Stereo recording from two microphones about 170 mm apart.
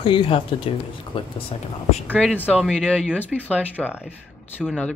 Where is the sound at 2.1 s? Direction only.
5° left (ahead or behind).